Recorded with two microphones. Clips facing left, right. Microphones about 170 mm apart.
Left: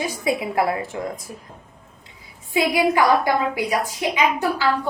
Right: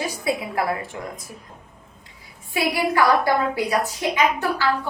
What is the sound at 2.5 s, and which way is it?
A woman's voice, 15° left (ahead or behind).